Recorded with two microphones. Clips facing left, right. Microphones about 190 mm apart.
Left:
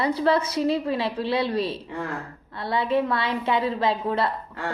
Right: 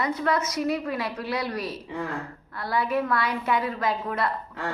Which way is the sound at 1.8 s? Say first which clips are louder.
Even; centre (ahead or behind).